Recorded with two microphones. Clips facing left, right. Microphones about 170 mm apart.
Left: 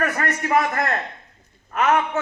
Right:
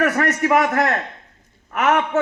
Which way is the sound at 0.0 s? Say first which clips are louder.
Right 5 dB; 75° right (ahead or behind).